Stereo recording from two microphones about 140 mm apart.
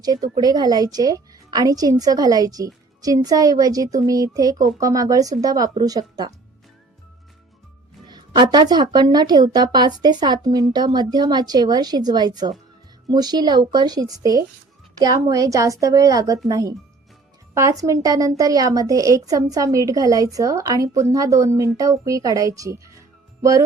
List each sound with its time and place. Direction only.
0.0 s a woman's voice: 30° right (ahead or behind)
8.0 s a woman's voice: 30° right (ahead or behind)
23.4 s music: 25° right (ahead or behind)